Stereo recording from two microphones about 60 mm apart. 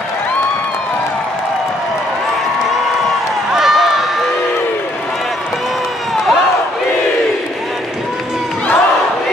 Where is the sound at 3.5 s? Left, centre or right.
Centre.